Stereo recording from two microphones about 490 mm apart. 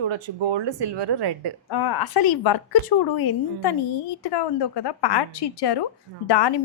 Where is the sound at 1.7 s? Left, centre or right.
Left.